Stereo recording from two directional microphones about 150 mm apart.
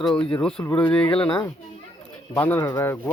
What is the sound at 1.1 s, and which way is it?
Speech, 35° left (ahead or behind).